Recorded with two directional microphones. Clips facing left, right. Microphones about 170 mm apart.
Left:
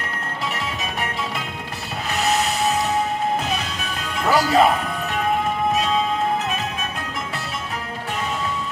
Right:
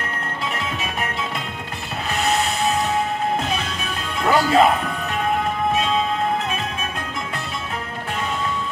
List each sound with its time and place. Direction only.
4.3 s speech: centre (ahead or behind)